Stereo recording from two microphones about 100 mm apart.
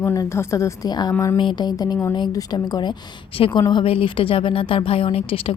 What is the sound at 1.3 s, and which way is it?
A woman's voice, 50° left (ahead or behind).